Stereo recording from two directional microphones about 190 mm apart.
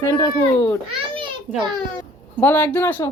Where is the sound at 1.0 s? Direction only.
25° right (ahead or behind).